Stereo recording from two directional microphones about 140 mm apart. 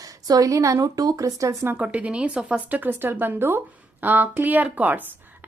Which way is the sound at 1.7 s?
10° right (ahead or behind).